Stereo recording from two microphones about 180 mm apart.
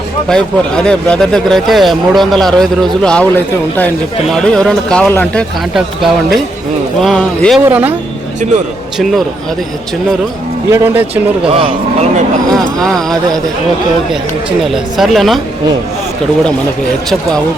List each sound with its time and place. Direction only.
0.3 s speech: 5° left (ahead or behind)
7.6 s speech: 10° right (ahead or behind)
10.7 s speech: 15° right (ahead or behind)
11.1 s speech: 30° right (ahead or behind)
12.8 s speech: centre (ahead or behind)
14.6 s speech: centre (ahead or behind)